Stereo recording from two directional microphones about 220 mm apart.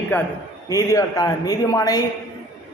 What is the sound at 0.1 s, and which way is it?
A man's voice, 10° left (ahead or behind).